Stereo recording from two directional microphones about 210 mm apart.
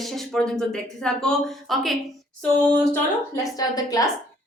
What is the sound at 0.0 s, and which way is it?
Speech, centre (ahead or behind).